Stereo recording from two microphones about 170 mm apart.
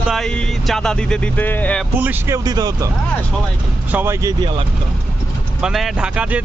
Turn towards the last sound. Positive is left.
turn(degrees=-5)  # may be behind; listen again after turning